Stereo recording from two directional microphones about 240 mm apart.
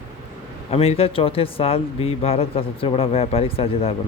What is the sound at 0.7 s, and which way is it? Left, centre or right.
Speech, left.